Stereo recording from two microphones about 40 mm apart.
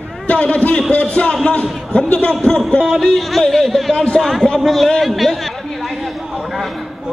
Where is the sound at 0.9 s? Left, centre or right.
Left.